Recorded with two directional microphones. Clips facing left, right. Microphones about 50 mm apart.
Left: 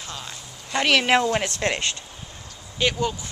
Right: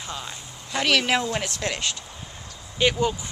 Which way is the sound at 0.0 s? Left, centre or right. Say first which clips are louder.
Right 2 dB; centre.